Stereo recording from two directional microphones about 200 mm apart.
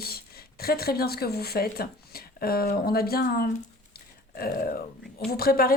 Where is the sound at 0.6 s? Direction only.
50° left (ahead or behind).